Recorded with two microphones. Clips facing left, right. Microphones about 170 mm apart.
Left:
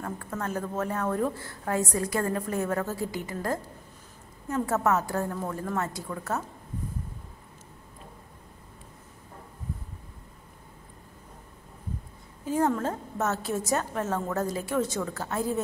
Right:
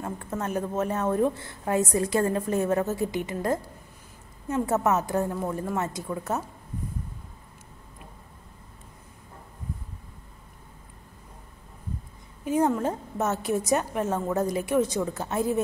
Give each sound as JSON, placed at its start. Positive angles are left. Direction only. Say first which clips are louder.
{"t": 0.0, "sound": "a woman's voice", "louder": "right 2 dB", "side_deg": -20}
{"t": 12.4, "sound": "a woman's voice", "louder": "right 2 dB", "side_deg": -15}